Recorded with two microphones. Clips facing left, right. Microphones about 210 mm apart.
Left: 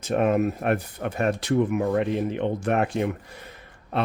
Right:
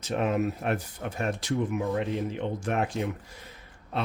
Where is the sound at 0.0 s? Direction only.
55° left (ahead or behind).